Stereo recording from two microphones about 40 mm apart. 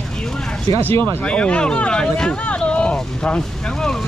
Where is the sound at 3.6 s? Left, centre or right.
Centre.